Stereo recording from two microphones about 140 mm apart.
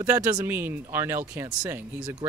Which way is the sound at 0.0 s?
15° right (ahead or behind).